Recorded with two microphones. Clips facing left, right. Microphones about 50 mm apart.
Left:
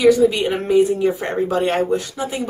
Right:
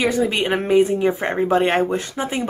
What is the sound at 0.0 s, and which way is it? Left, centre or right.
Speech, right.